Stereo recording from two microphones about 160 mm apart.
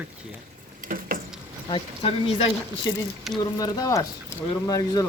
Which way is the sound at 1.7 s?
35° left (ahead or behind).